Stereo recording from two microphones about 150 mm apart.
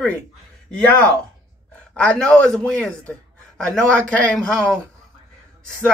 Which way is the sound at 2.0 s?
5° left (ahead or behind).